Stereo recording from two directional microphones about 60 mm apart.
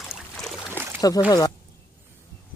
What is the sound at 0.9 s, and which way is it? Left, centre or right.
Speech, left.